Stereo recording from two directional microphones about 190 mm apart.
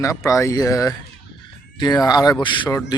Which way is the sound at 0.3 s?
15° left (ahead or behind).